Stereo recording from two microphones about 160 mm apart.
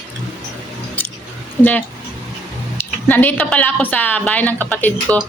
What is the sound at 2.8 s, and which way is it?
A woman's voice, 10° left (ahead or behind).